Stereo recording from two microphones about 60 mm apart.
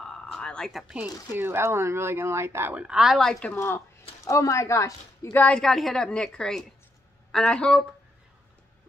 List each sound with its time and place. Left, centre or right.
0.0 s a sound: centre
1.3 s speech: right
2.7 s a woman's voice: centre
3.2 s a woman's voice: centre
3.5 s speech: left
4.2 s speech: left
5.5 s a woman's voice: centre